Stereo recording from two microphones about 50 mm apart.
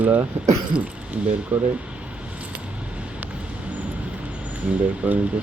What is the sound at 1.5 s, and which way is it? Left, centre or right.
Speech, right.